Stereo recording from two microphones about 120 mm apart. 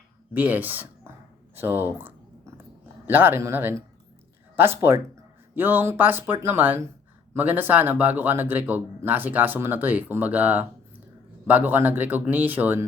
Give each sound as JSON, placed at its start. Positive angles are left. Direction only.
{"t": 0.3, "sound": "speech", "side_deg": -15}
{"t": 1.5, "sound": "a sound", "side_deg": -20}
{"t": 3.1, "sound": "speech", "side_deg": -15}